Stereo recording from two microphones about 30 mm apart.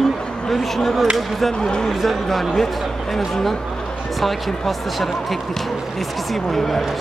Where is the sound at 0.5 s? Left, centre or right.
Centre.